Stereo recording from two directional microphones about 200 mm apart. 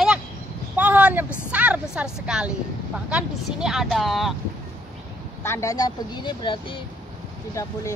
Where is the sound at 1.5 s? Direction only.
5° right (ahead or behind).